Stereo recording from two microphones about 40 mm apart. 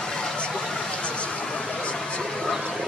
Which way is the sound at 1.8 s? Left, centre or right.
Left.